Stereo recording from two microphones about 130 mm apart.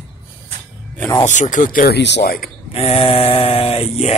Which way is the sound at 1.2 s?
70° left (ahead or behind).